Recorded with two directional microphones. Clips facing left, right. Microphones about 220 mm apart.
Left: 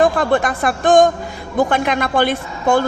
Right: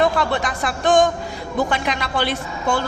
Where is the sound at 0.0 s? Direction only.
50° left (ahead or behind).